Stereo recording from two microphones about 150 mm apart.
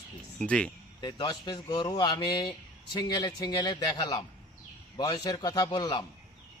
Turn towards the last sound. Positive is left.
turn(degrees=30)  # may be behind; listen again after turning